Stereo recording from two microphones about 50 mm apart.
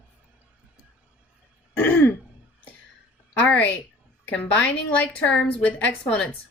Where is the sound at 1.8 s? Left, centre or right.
Left.